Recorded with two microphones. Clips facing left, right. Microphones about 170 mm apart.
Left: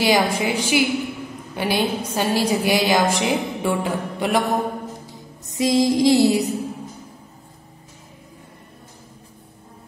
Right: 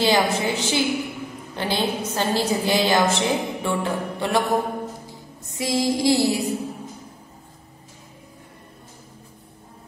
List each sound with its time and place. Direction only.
0.0 s a woman's voice: 10° left (ahead or behind)
5.5 s music: 20° left (ahead or behind)